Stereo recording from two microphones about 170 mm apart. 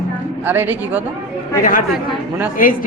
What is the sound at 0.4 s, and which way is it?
Speech, 10° right (ahead or behind).